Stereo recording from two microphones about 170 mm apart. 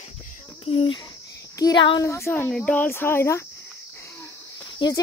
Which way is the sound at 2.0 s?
15° left (ahead or behind).